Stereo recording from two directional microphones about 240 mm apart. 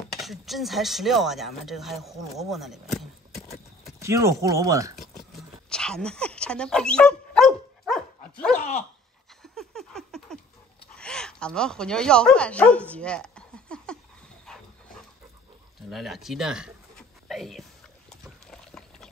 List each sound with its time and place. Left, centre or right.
0.1 s speech: centre
3.4 s clip-clop: left
4.0 s speech: centre
5.3 s dog: centre
9.4 s a sound: centre
11.0 s speech: centre
12.9 s a sound: centre
15.9 s speech: centre
17.3 s a sound: centre
18.1 s liquid: centre